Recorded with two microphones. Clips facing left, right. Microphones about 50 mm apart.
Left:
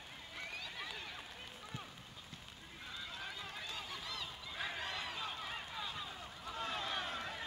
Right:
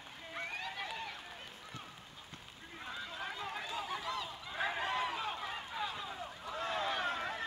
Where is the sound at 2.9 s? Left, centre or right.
Right.